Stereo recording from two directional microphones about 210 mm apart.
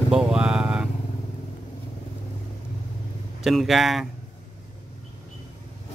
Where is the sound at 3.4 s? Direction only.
Centre (ahead or behind).